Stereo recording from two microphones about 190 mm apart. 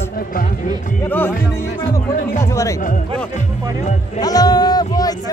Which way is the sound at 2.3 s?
15° left (ahead or behind).